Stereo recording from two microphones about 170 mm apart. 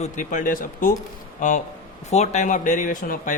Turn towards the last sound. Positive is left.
turn(degrees=50)  # may be behind; listen again after turning